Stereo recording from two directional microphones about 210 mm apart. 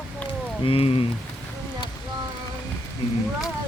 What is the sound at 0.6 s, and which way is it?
Speech, 25° left (ahead or behind).